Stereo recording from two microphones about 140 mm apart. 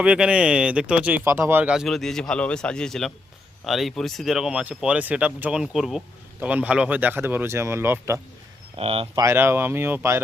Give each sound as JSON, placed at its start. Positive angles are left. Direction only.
{"t": 0.0, "sound": "speech", "side_deg": -5}
{"t": 8.7, "sound": "speech", "side_deg": -45}
{"t": 9.1, "sound": "speech", "side_deg": -20}